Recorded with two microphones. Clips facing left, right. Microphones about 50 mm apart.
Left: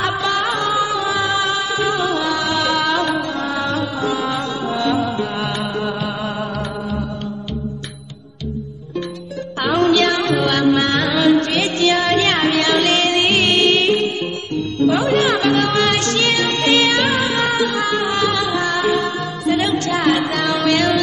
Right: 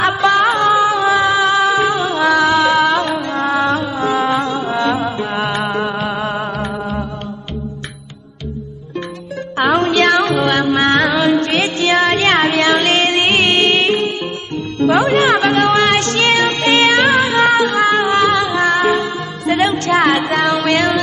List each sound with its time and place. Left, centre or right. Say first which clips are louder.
0.0 s music: right 6 dB; right
9.6 s music: right 2 dB; right
14.5 s music: right 2 dB; right
15.1 s music: right 3 dB; right